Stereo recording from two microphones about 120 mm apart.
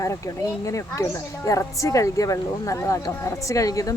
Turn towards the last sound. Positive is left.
turn(degrees=30)  # may be behind; listen again after turning